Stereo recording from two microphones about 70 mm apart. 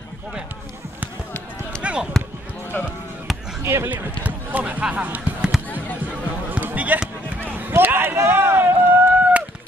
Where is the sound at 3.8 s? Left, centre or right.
Right.